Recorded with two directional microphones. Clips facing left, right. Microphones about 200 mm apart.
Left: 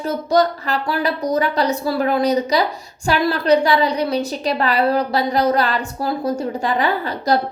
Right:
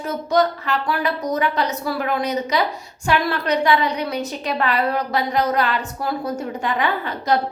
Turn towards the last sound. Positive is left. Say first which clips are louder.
# left 2 dB
turn(degrees=35)  # may be behind; listen again after turning